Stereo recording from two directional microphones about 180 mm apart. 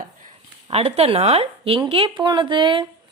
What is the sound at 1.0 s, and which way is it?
A woman's voice, 35° right (ahead or behind).